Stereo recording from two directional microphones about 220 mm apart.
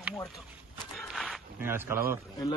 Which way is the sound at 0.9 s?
Centre (ahead or behind).